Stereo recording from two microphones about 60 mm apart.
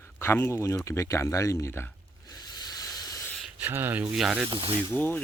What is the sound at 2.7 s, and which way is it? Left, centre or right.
Hiss, left.